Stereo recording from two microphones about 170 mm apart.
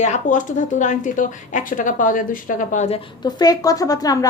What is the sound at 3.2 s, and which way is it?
A woman's voice, 25° left (ahead or behind).